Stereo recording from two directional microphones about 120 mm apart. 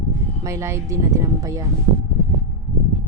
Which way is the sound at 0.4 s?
25° right (ahead or behind).